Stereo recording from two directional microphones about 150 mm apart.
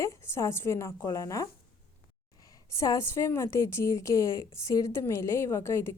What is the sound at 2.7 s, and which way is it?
A woman's voice, 20° left (ahead or behind).